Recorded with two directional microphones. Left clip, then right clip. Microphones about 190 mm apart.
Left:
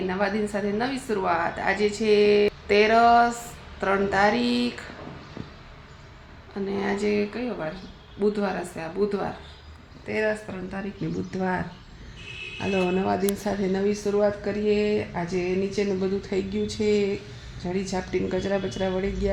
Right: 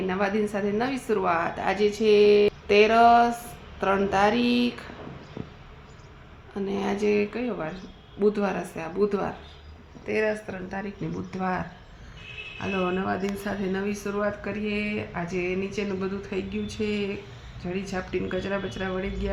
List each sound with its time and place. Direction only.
0.1 s a woman's voice: 10° right (ahead or behind)
6.7 s a woman's voice: 5° right (ahead or behind)
13.1 s a woman's voice: 5° right (ahead or behind)